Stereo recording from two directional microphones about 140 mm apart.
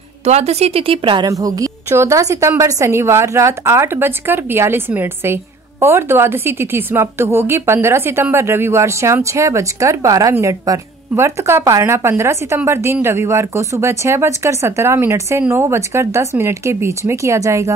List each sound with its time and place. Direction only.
0.2 s a woman's voice: 50° right (ahead or behind)
1.2 s a woman's voice: 25° right (ahead or behind)